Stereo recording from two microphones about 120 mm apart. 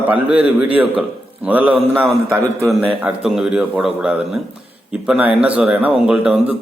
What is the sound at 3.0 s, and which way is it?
Speech, 5° right (ahead or behind).